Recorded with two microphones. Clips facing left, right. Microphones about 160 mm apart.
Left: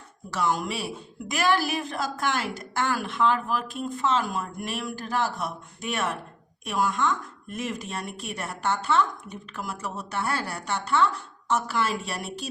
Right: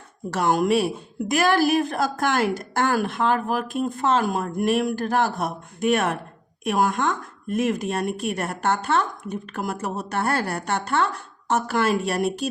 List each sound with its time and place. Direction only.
0.3 s speech: 55° right (ahead or behind)